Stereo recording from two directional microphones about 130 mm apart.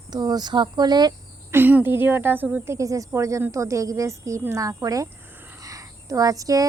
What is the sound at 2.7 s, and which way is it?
A woman's voice, 25° right (ahead or behind).